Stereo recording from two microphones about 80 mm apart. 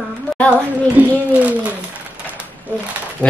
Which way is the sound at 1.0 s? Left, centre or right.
Right.